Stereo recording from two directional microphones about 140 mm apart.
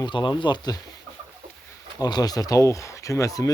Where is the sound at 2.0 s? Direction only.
30° left (ahead or behind).